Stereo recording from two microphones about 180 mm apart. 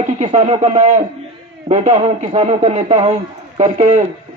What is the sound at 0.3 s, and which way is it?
A man's voice, 35° right (ahead or behind).